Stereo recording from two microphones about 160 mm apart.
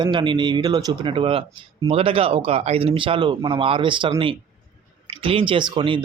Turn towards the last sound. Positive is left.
turn(degrees=-30)  # may be behind; listen again after turning